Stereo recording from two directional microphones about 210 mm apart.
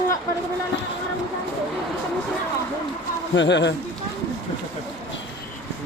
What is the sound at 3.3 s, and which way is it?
Speech, 55° left (ahead or behind).